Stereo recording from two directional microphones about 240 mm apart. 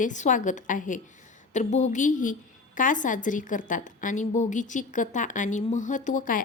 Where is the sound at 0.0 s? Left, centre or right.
Left.